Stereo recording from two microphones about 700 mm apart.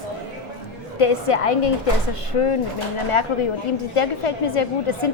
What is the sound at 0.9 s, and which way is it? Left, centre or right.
A woman's voice, left.